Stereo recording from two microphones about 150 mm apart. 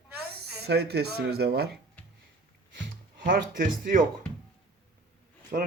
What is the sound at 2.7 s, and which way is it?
Speech, 70° right (ahead or behind).